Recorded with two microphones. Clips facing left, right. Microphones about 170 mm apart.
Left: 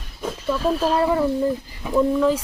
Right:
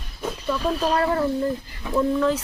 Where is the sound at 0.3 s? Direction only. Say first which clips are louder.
Left 3 dB; 5° left (ahead or behind).